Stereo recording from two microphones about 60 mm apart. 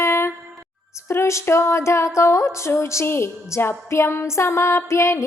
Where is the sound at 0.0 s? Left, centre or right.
Left.